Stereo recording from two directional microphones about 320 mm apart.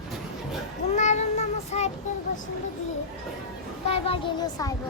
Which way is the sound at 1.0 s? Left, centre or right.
Left.